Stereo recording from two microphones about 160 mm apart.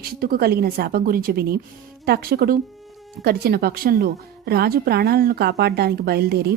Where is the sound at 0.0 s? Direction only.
70° right (ahead or behind).